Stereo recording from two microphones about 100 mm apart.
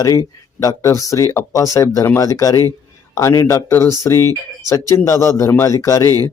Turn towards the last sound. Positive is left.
turn(degrees=30)  # may be behind; listen again after turning